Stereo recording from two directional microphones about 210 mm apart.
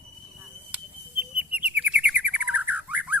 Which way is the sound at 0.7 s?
5° right (ahead or behind).